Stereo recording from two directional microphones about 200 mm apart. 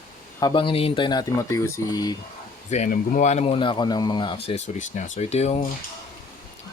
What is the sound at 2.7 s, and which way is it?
Speech, 40° left (ahead or behind).